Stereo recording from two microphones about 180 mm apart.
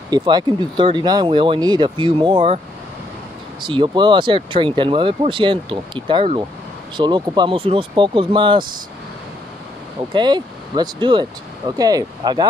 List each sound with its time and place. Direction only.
0.1 s speech: 20° right (ahead or behind)
3.6 s speech: 25° right (ahead or behind)
10.1 s speech: 25° right (ahead or behind)